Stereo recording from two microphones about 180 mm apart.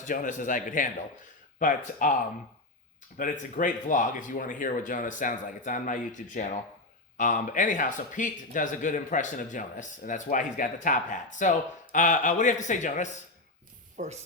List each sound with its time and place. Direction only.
0.0 s speech: 45° left (ahead or behind)
3.2 s speech: 45° left (ahead or behind)
13.9 s speech: 40° right (ahead or behind)